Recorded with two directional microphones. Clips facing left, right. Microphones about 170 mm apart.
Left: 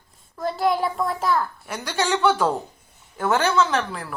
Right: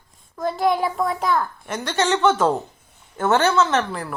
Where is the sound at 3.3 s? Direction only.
10° left (ahead or behind).